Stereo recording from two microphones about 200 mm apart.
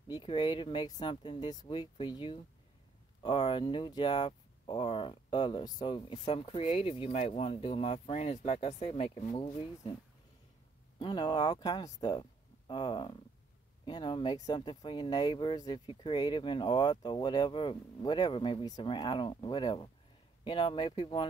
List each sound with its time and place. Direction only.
0.1 s speech: 20° left (ahead or behind)
11.0 s speech: 20° left (ahead or behind)